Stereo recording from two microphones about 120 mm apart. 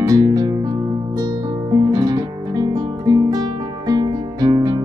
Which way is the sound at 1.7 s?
35° right (ahead or behind).